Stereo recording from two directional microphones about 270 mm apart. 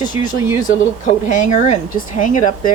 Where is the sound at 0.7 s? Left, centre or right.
Left.